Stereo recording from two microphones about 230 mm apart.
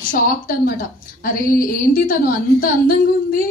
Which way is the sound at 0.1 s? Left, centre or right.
Left.